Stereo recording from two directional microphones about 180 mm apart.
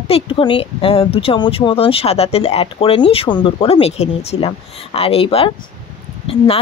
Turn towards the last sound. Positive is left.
turn(degrees=30)  # may be behind; listen again after turning